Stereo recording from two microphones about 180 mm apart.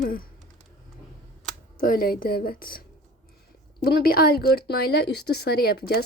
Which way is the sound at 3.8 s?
55° left (ahead or behind).